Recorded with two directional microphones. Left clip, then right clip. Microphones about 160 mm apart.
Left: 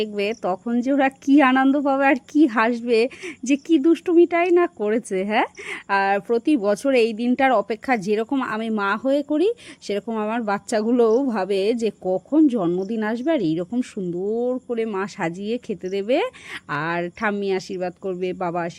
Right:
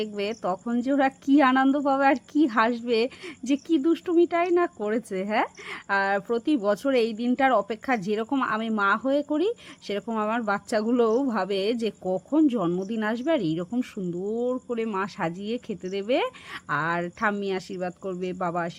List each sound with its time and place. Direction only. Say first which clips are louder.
0.0 s speech: left 5 dB; 30° left (ahead or behind)